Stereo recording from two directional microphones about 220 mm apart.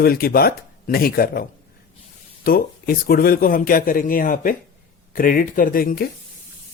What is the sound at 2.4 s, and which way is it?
A man's voice, 40° left (ahead or behind).